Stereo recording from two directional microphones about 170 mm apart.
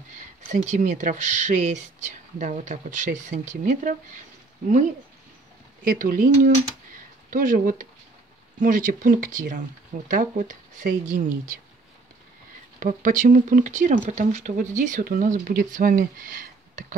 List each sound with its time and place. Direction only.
0.5 s speech: 45° right (ahead or behind)
5.9 s speech: 55° right (ahead or behind)
12.7 s speech: 50° right (ahead or behind)